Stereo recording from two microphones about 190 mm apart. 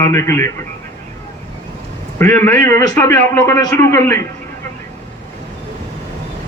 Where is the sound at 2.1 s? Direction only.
15° left (ahead or behind).